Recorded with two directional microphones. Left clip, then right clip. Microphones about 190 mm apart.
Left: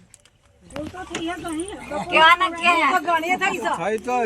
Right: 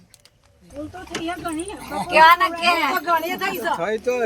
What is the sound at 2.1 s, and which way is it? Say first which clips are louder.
Speech: right 2 dB; 15° right (ahead or behind).